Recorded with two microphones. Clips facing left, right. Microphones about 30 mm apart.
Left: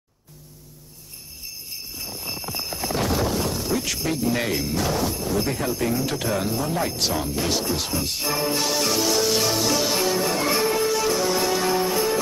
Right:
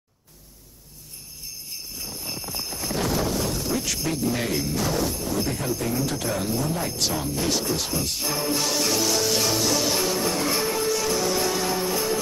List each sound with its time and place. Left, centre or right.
2.0 s jingle bell: centre
4.3 s speech: centre
4.6 s speech: centre
8.5 s music: centre